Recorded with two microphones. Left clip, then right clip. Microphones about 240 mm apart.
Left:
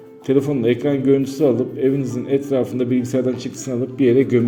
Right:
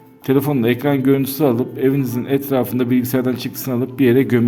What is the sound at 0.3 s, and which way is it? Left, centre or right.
A man's voice, right.